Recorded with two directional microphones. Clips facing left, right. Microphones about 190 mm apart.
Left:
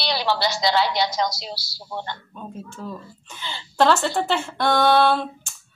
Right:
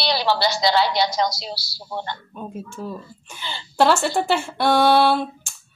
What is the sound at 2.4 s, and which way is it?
Speech, 10° right (ahead or behind).